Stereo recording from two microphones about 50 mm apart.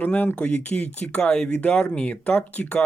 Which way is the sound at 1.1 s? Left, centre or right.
Centre.